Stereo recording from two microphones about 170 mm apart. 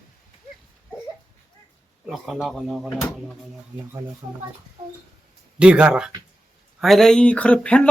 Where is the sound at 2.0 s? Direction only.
Centre (ahead or behind).